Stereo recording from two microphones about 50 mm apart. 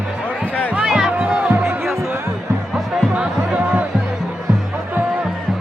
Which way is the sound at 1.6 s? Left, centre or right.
Centre.